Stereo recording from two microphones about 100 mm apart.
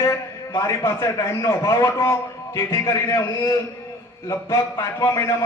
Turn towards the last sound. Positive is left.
turn(degrees=30)  # may be behind; listen again after turning